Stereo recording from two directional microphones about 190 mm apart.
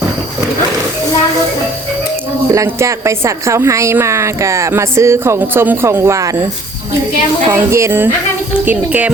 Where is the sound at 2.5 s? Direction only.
15° right (ahead or behind).